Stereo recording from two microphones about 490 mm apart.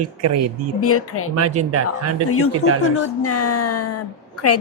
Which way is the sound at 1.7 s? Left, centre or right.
Right.